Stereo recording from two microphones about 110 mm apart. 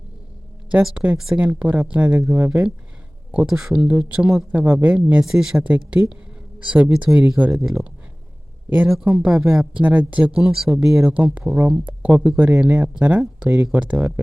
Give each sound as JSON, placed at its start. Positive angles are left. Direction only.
{"t": 0.7, "sound": "speech", "side_deg": -10}
{"t": 3.3, "sound": "speech", "side_deg": -5}
{"t": 8.7, "sound": "speech", "side_deg": -15}
{"t": 9.3, "sound": "speech", "side_deg": -25}
{"t": 9.7, "sound": "speech", "side_deg": -15}